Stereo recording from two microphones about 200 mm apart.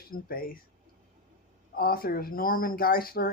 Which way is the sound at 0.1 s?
45° left (ahead or behind).